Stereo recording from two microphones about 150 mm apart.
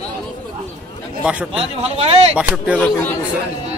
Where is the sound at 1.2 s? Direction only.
5° right (ahead or behind).